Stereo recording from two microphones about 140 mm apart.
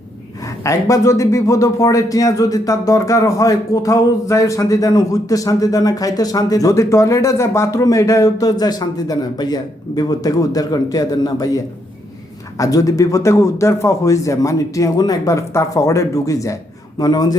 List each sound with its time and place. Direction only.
0.6 s speech: 20° left (ahead or behind)